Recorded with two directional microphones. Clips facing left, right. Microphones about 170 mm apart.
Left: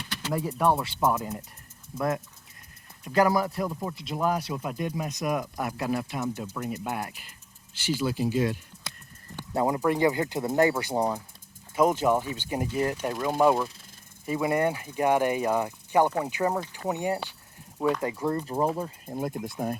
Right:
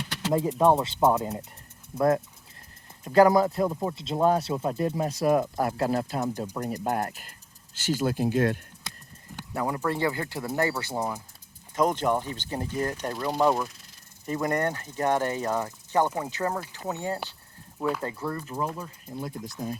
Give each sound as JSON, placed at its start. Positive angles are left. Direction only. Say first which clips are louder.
{"t": 0.1, "sound": "a sound", "louder": "right 4 dB", "side_deg": -90}
{"t": 0.6, "sound": "speech", "louder": "right 3 dB", "side_deg": -20}
{"t": 9.6, "sound": "speech", "louder": "left 4 dB", "side_deg": 20}
{"t": 18.3, "sound": "speech", "louder": "left 5 dB", "side_deg": 35}
{"t": 18.8, "sound": "speech", "louder": "left 5 dB", "side_deg": 50}